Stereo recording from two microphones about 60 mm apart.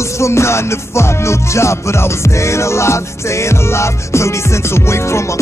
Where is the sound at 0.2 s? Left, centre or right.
Left.